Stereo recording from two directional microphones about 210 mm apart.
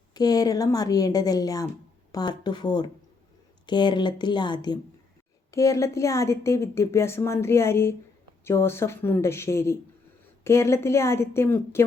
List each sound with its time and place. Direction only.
0.1 s a woman's voice: 20° left (ahead or behind)